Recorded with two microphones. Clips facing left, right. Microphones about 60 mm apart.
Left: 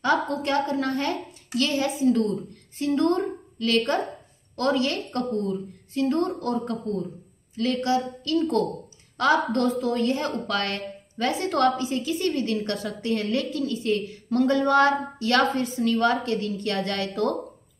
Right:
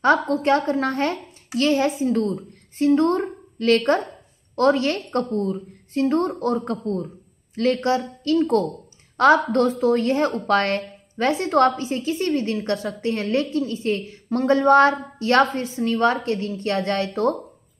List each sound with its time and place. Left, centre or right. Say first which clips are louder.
0.0 s a woman's voice: right 5 dB; right